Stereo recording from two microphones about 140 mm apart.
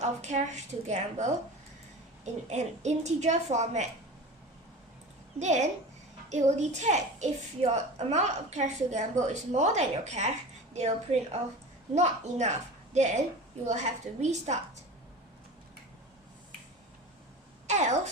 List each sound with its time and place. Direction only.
0.0 s a woman's voice: 55° right (ahead or behind)
5.4 s a woman's voice: 55° right (ahead or behind)
17.7 s a woman's voice: 55° right (ahead or behind)